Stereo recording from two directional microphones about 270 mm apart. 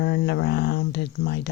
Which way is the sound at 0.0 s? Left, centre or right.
Left.